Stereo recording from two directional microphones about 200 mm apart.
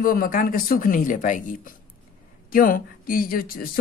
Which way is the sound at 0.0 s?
45° left (ahead or behind).